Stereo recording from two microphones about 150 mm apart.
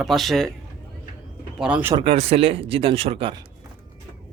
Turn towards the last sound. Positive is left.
turn(degrees=-40)  # may be behind; listen again after turning